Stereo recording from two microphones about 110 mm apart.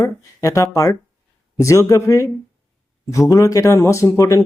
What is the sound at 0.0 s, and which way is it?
Speech, 30° left (ahead or behind).